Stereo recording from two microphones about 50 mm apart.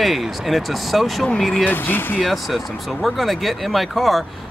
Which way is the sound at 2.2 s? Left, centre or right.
Centre.